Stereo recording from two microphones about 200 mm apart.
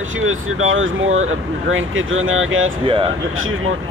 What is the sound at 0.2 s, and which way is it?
Speech, 90° right.